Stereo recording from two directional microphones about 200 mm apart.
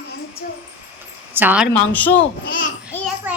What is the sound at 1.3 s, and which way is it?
Speech, 10° right (ahead or behind).